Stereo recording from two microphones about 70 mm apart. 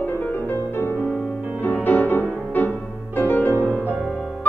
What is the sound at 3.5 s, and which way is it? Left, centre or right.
Music, right.